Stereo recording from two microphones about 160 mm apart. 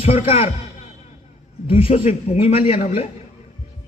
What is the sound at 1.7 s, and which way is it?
A man's voice, 40° left (ahead or behind).